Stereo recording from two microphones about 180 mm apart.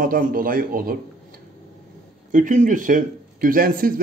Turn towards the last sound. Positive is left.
turn(degrees=-50)  # may be behind; listen again after turning